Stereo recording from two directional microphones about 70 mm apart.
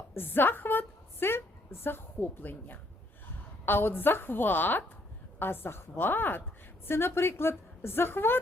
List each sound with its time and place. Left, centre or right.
0.1 s a woman's voice: left